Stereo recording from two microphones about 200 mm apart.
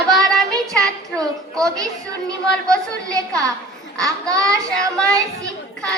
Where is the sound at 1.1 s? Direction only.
15° right (ahead or behind).